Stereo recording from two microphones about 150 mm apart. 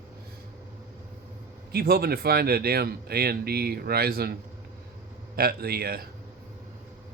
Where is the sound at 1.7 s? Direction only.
90° right.